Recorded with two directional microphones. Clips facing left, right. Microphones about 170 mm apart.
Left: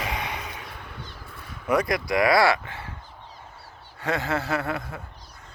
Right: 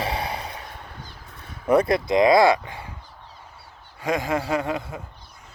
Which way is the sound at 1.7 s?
30° right (ahead or behind).